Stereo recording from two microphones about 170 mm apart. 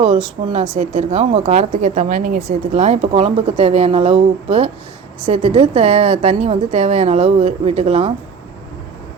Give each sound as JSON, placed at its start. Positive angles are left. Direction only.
{"t": 0.4, "sound": "speech", "side_deg": -40}